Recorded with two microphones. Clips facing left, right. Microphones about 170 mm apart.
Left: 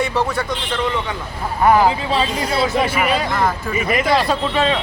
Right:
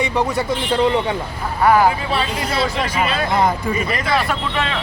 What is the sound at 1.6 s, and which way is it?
A man's voice, 15° left (ahead or behind).